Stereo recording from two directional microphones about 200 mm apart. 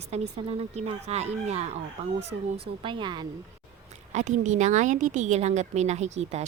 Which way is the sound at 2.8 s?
25° right (ahead or behind).